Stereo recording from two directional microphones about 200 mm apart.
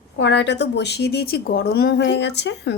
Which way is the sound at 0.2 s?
60° left (ahead or behind).